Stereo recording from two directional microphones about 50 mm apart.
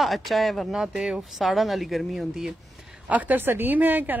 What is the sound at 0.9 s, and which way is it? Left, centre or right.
Speech, centre.